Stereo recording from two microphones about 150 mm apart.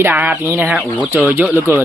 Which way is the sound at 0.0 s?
10° right (ahead or behind).